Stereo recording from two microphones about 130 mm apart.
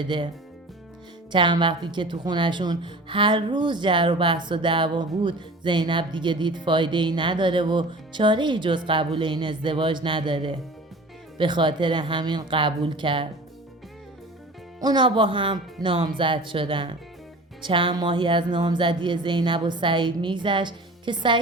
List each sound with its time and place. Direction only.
0.0 s a woman's voice: 40° right (ahead or behind)
1.3 s a woman's voice: 35° right (ahead or behind)
14.8 s a woman's voice: 35° right (ahead or behind)